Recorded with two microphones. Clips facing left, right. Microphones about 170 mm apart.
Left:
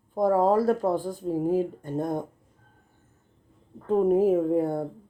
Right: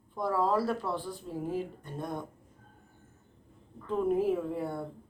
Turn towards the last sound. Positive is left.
turn(degrees=45)  # may be behind; listen again after turning